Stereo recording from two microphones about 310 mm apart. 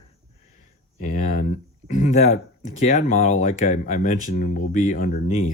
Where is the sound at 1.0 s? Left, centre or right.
Left.